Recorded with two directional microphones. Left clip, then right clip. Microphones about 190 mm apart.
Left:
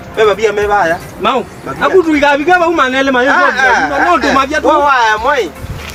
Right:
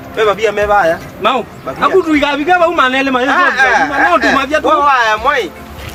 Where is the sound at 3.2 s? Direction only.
15° right (ahead or behind).